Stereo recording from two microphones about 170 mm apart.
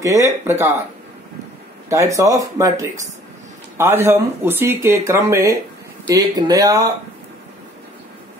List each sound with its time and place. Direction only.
0.0 s speech: 15° right (ahead or behind)
1.9 s speech: 15° right (ahead or behind)